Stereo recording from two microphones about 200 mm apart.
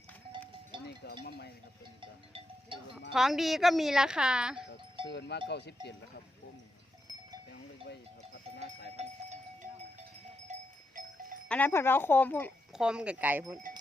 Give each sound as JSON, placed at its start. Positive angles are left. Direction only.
{"t": 1.2, "sound": "speech", "side_deg": 55}
{"t": 2.0, "sound": "music", "side_deg": -25}
{"t": 3.1, "sound": "speech", "side_deg": 0}
{"t": 5.0, "sound": "speech", "side_deg": 60}
{"t": 7.9, "sound": "goat", "side_deg": 60}
{"t": 9.0, "sound": "a sound", "side_deg": -35}
{"t": 10.5, "sound": "cowbell", "side_deg": -40}
{"t": 11.4, "sound": "speech", "side_deg": 10}
{"t": 12.7, "sound": "speech", "side_deg": -5}